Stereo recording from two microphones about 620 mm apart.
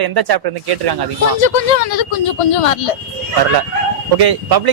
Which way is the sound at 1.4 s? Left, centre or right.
Left.